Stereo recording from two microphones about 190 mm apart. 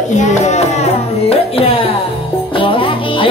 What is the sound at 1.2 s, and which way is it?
Music, 30° left (ahead or behind).